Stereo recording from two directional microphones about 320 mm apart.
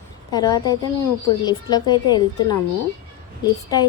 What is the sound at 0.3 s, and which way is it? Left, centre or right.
A woman's voice, centre.